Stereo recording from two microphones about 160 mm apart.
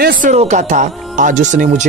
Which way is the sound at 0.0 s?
75° right (ahead or behind).